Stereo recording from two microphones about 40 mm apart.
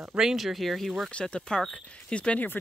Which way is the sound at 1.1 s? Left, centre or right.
Left.